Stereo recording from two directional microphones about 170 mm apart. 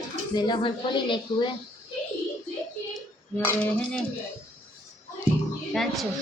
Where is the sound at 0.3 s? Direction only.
25° left (ahead or behind).